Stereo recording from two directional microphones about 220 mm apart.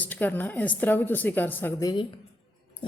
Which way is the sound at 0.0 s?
10° left (ahead or behind).